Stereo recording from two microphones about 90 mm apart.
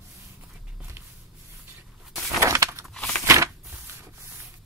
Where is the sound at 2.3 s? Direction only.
35° right (ahead or behind).